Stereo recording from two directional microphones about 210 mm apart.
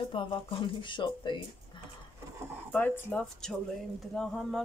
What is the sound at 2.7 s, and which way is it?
Speech, 10° left (ahead or behind).